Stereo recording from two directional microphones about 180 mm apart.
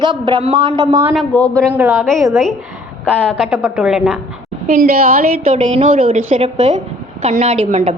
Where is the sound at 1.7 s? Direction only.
10° right (ahead or behind).